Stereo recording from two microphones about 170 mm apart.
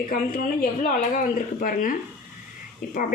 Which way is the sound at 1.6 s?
55° left (ahead or behind).